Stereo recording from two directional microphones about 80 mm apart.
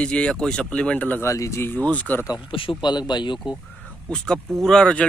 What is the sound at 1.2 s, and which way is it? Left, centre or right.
Speech, left.